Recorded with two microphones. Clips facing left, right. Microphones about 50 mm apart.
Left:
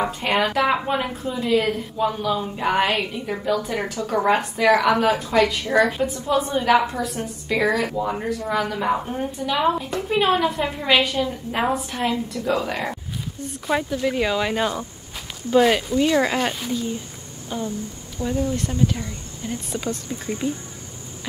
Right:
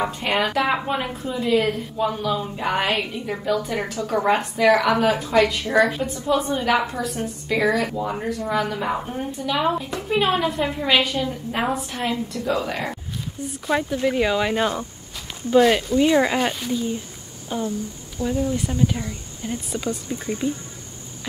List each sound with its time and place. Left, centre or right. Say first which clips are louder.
0.0 s speech: left 1 dB; centre
16.0 s speech: right 2 dB; centre